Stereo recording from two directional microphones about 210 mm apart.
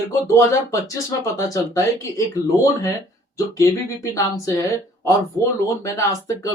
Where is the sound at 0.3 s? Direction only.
15° left (ahead or behind).